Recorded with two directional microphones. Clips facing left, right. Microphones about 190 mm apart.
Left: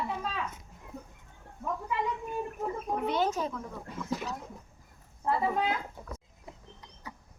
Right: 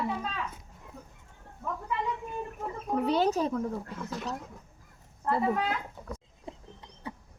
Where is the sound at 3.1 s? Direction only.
35° right (ahead or behind).